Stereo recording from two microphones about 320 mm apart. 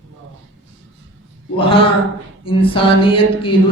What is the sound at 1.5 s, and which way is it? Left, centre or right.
Speech, centre.